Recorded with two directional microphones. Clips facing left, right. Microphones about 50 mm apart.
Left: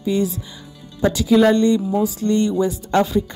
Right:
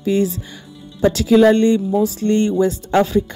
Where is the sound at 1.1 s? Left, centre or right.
Right.